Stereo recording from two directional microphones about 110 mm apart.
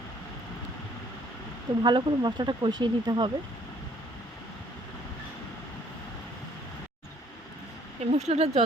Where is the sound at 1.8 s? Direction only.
45° right (ahead or behind).